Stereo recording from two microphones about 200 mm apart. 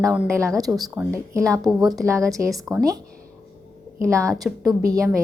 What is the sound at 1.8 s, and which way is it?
Speech, 20° right (ahead or behind).